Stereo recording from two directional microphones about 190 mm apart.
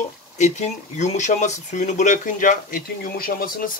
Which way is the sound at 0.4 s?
35° left (ahead or behind).